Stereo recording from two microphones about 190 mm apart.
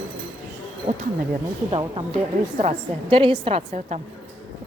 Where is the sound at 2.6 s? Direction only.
35° right (ahead or behind).